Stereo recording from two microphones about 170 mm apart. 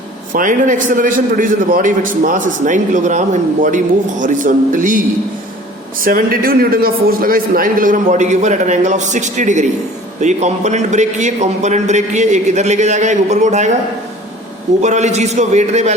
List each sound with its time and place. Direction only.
0.3 s a man's voice: 50° right (ahead or behind)
14.8 s a man's voice: 40° right (ahead or behind)